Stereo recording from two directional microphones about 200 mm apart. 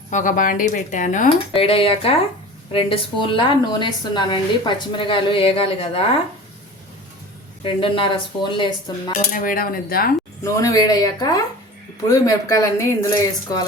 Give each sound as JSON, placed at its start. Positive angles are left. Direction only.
{"t": 0.1, "sound": "speech", "side_deg": 40}
{"t": 1.5, "sound": "a woman's voice", "side_deg": 25}
{"t": 7.6, "sound": "a woman's voice", "side_deg": 25}
{"t": 9.3, "sound": "speech", "side_deg": 45}
{"t": 10.4, "sound": "a woman's voice", "side_deg": 15}